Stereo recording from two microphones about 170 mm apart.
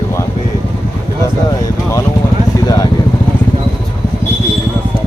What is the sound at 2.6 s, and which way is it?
Vehicle, 20° left (ahead or behind).